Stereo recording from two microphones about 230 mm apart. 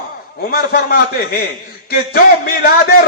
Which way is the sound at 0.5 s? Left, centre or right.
Left.